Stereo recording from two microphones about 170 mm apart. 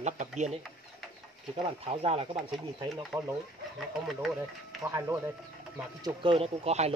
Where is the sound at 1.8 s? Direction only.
35° right (ahead or behind).